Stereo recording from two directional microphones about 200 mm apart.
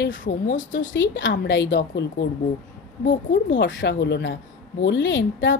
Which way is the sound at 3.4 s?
65° left (ahead or behind).